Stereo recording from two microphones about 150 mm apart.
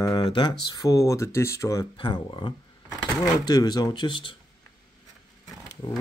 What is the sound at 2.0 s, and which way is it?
Speech, 30° left (ahead or behind).